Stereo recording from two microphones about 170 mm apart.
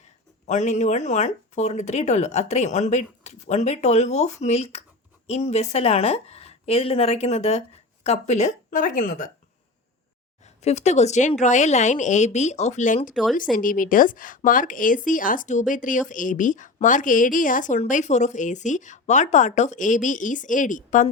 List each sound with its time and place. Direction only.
0.4 s a woman's voice: 45° left (ahead or behind)
10.6 s speech: 40° left (ahead or behind)